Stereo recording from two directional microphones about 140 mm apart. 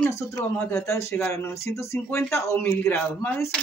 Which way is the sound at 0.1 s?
15° left (ahead or behind).